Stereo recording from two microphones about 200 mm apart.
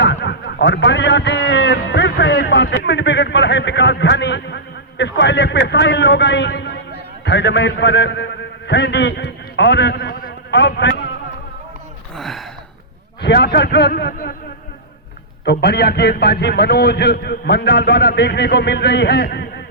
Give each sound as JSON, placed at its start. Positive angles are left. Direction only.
{"t": 0.0, "sound": "a sound", "side_deg": 60}
{"t": 7.3, "sound": "a man's voice", "side_deg": 60}
{"t": 12.1, "sound": "gasp", "side_deg": 0}
{"t": 13.2, "sound": "a man's voice", "side_deg": 55}
{"t": 15.4, "sound": "a man's voice", "side_deg": 55}